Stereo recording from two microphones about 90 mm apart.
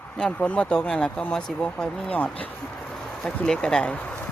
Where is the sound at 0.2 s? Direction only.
10° left (ahead or behind).